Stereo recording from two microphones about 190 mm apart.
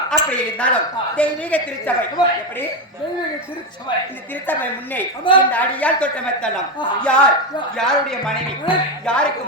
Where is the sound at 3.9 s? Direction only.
25° left (ahead or behind).